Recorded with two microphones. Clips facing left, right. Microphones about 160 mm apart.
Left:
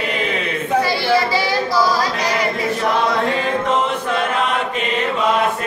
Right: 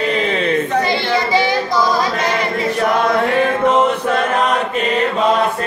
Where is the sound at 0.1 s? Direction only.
30° right (ahead or behind).